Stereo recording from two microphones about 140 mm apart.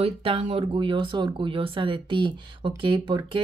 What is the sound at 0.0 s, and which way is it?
Speech, 40° right (ahead or behind).